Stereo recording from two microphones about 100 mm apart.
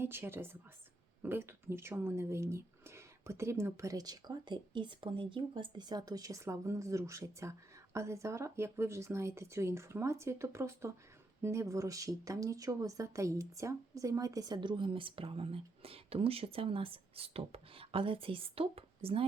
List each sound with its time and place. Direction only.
0.0 s speech: 25° right (ahead or behind); by 19.2 s 75° right (ahead or behind)